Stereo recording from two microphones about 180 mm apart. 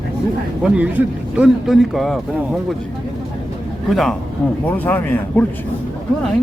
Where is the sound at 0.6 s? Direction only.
5° right (ahead or behind).